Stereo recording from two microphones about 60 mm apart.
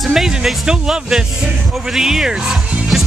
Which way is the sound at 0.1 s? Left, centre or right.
Centre.